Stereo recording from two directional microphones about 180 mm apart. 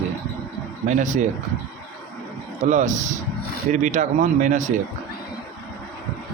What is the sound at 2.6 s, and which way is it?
Speech, 40° right (ahead or behind).